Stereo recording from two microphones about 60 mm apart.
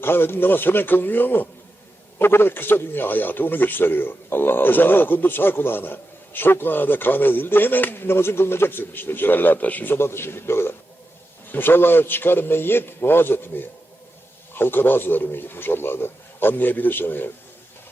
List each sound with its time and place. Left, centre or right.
0.0 s a man's voice: left